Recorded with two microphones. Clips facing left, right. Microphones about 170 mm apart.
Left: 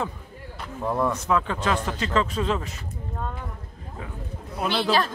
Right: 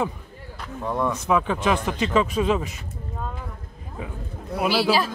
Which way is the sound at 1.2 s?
15° right (ahead or behind).